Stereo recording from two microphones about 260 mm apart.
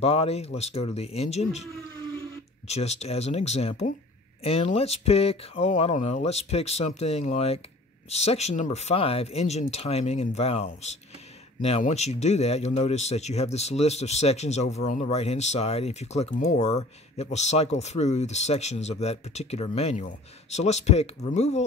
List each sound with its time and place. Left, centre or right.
0.0 s a man's voice: left
2.7 s a man's voice: left